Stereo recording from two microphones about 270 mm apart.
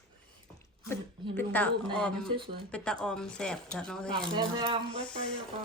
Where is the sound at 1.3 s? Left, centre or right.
Centre.